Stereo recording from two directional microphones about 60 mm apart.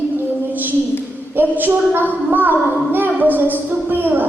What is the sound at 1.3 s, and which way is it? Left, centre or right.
A woman's voice, right.